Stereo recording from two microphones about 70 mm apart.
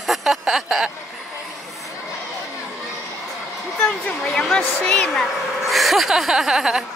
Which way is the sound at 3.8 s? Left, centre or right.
Centre.